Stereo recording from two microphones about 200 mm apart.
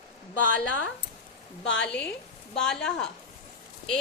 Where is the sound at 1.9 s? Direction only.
5° left (ahead or behind).